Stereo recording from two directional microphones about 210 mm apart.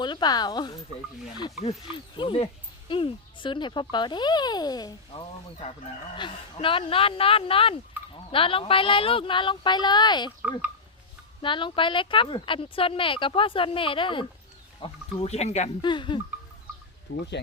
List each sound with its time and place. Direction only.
0.0 s speech: 20° left (ahead or behind)
2.1 s speech: 25° left (ahead or behind)
11.4 s speech: 25° left (ahead or behind)
17.4 s speech: 50° left (ahead or behind)